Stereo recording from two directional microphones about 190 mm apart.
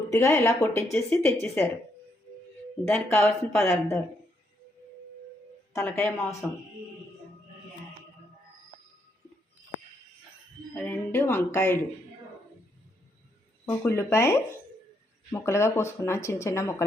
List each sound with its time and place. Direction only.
0.1 s speech: 15° left (ahead or behind)
2.8 s speech: 10° left (ahead or behind)
5.7 s speech: 5° left (ahead or behind)
10.8 s speech: 10° left (ahead or behind)
13.7 s speech: 10° left (ahead or behind)